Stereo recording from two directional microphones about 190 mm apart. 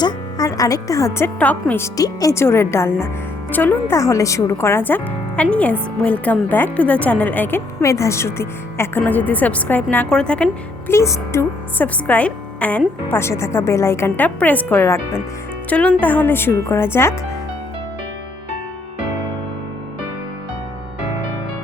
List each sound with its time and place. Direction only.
0.0 s a woman's voice: 20° left (ahead or behind)